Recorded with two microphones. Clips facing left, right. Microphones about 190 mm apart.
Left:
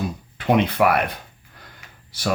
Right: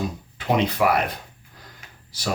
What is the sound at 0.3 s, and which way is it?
Speech, 60° left (ahead or behind).